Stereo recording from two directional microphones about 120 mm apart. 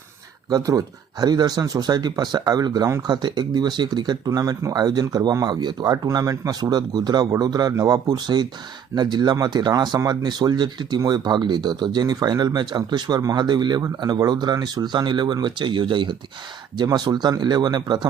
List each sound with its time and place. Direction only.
0.5 s speech: 30° right (ahead or behind)